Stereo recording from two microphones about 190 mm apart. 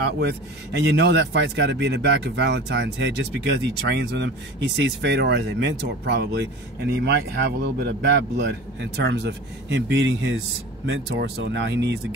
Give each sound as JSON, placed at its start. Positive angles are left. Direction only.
{"t": 0.2, "sound": "speech", "side_deg": -60}